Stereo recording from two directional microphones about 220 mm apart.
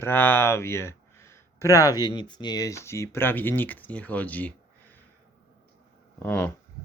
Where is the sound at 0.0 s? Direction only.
10° left (ahead or behind).